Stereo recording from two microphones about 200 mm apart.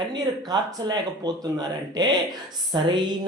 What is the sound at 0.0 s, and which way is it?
Speech, 20° right (ahead or behind).